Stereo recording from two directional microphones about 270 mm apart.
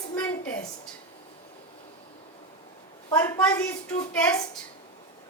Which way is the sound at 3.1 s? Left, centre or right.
Centre.